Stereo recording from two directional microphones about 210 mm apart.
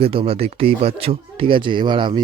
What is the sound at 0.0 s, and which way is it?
Speech, 25° right (ahead or behind).